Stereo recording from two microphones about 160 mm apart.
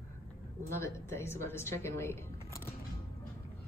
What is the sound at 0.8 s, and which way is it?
Speech, 15° left (ahead or behind).